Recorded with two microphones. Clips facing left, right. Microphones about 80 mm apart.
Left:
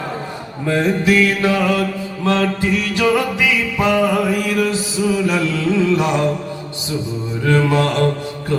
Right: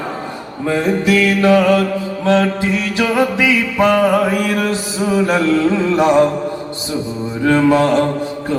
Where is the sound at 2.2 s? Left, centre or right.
Right.